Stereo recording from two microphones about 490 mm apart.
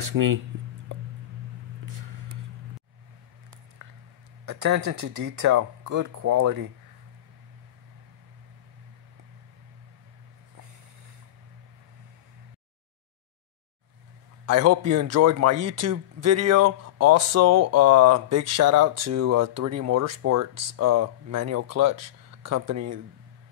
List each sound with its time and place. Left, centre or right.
0.0 s speech: right
4.5 s speech: right
14.4 s speech: right